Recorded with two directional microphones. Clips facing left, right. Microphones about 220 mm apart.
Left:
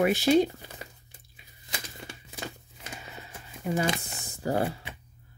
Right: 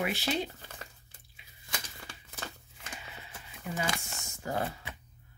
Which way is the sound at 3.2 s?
45° left (ahead or behind).